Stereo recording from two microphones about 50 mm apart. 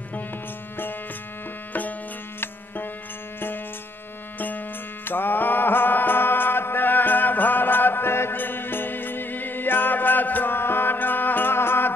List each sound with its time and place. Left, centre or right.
1.7 s music: left